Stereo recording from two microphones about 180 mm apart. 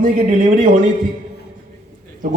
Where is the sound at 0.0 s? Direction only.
50° right (ahead or behind).